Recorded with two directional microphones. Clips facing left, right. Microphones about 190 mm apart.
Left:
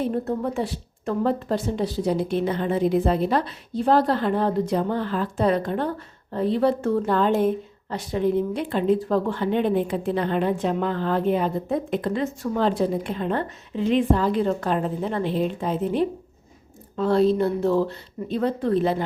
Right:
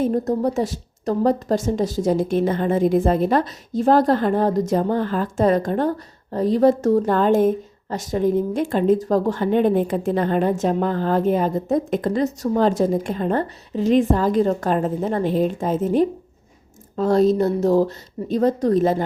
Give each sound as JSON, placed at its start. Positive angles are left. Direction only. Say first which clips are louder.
{"t": 0.0, "sound": "a woman's voice", "louder": "right 5 dB", "side_deg": -40}